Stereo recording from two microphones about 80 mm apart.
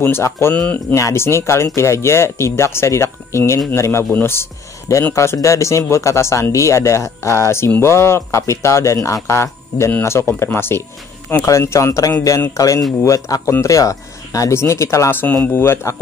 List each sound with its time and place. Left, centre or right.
0.0 s speech: left
0.6 s speech: centre
0.9 s a man's voice: left
14.6 s speech: left